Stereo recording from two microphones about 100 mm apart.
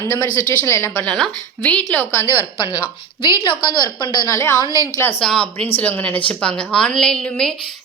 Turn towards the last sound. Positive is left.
turn(degrees=5)  # may be behind; listen again after turning